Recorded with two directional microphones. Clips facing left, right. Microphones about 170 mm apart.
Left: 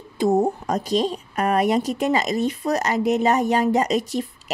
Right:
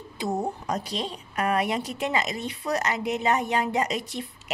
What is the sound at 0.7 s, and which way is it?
A woman's voice, 45° left (ahead or behind).